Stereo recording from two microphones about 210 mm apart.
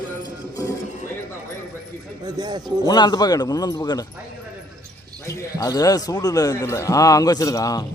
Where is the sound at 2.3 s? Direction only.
20° right (ahead or behind).